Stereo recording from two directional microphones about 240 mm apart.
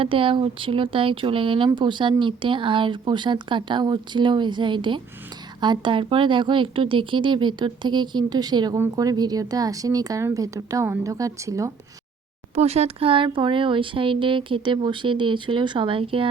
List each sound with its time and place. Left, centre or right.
0.0 s a woman's voice: right
12.5 s speech: right